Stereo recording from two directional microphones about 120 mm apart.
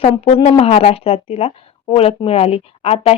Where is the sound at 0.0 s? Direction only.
55° left (ahead or behind).